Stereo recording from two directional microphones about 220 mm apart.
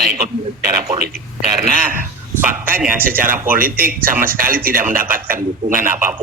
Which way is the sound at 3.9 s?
40° right (ahead or behind).